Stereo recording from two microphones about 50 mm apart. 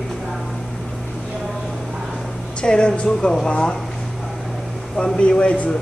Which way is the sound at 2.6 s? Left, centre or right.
Centre.